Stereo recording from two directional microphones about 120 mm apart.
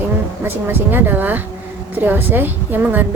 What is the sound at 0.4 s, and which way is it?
A woman's voice, 15° right (ahead or behind).